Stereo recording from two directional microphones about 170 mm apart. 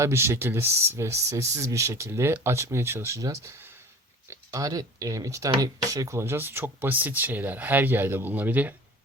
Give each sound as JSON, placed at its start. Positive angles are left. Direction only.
{"t": 0.0, "sound": "speech", "side_deg": -15}